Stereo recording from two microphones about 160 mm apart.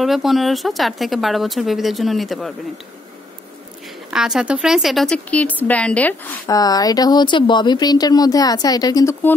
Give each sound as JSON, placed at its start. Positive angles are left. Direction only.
{"t": 0.0, "sound": "speech", "side_deg": 0}
{"t": 4.1, "sound": "speech", "side_deg": -5}
{"t": 6.4, "sound": "speech", "side_deg": 25}